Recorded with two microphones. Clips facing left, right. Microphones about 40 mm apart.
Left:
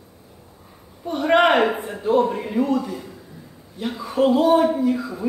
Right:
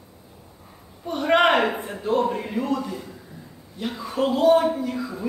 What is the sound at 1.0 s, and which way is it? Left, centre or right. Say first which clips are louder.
A man's voice: left 2 dB; centre.